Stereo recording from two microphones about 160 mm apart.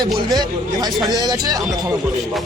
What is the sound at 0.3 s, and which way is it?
Speech, 25° right (ahead or behind).